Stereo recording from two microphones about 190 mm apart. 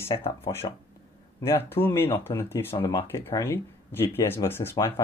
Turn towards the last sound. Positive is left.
turn(degrees=10)  # may be behind; listen again after turning